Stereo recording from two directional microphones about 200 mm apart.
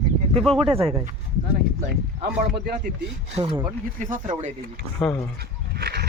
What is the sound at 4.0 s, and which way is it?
Speech, 40° right (ahead or behind).